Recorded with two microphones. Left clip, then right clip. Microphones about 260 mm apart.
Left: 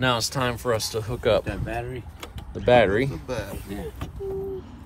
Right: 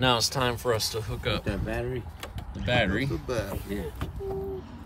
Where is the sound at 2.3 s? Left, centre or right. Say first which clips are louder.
Left 9 dB; centre.